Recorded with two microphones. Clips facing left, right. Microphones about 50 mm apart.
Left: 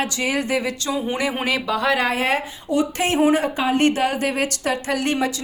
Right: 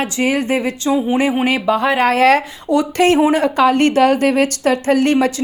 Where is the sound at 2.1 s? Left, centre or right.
Right.